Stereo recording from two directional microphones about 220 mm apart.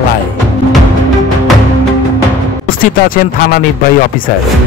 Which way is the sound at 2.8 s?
40° left (ahead or behind).